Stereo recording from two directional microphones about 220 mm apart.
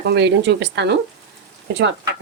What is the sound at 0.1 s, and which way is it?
Speech, 50° right (ahead or behind).